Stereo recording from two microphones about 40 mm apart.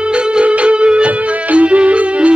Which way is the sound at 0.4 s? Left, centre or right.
Right.